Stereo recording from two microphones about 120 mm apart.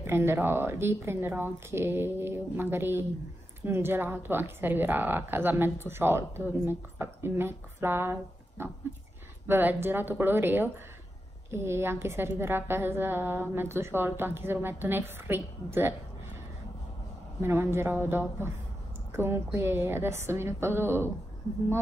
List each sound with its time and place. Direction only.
0.0 s a woman's voice: 20° right (ahead or behind)
17.4 s speech: 20° right (ahead or behind)